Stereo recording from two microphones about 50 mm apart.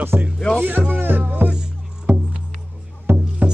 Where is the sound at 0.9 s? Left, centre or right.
Right.